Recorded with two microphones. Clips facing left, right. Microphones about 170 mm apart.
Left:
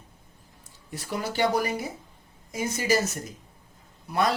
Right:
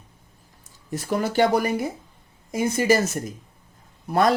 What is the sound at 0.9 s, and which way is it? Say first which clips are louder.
Speech: right 7 dB; 50° right (ahead or behind).